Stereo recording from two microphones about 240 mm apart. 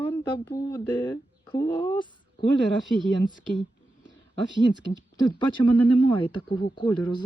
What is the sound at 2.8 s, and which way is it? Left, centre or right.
Speech, centre.